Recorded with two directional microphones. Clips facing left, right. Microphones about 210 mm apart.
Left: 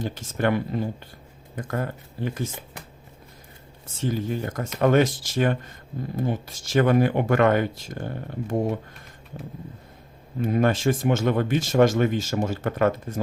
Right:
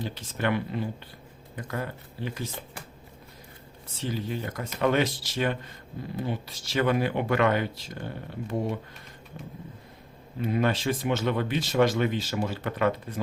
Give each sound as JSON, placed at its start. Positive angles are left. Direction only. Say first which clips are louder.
{"t": 0.0, "sound": "speech", "louder": "left 5 dB", "side_deg": 45}
{"t": 3.9, "sound": "speech", "louder": "left 5 dB", "side_deg": 45}
{"t": 10.4, "sound": "speech", "louder": "left 4 dB", "side_deg": 45}